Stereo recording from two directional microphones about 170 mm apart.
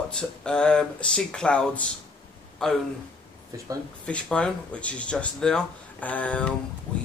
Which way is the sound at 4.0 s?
5° left (ahead or behind).